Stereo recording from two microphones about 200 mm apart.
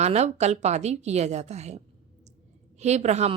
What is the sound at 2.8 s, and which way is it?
Speech, 35° right (ahead or behind).